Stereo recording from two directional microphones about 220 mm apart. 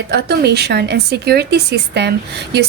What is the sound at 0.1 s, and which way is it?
A woman's voice, 45° right (ahead or behind).